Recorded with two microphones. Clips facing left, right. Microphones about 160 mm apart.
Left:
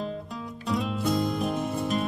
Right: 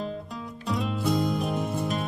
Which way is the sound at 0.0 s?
Centre (ahead or behind).